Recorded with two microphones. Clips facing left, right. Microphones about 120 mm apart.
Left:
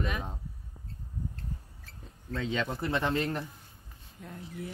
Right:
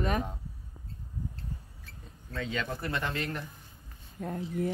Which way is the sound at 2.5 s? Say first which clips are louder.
Left 3 dB; 25° left (ahead or behind).